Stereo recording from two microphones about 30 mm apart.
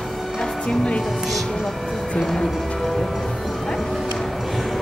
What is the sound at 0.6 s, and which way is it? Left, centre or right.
Speech, left.